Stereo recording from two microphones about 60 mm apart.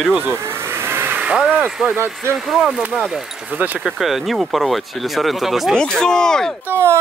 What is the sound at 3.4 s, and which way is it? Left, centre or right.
Speech, right.